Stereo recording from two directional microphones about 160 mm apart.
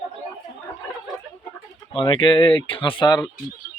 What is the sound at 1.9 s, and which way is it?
Speech, 30° left (ahead or behind).